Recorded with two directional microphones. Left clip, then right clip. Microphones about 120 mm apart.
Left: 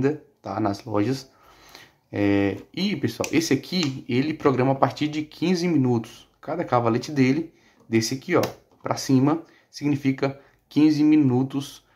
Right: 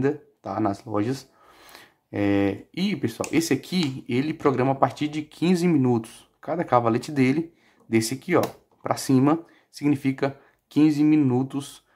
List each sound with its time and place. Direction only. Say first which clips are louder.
0.0 s speech: left 1 dB; 25° right (ahead or behind)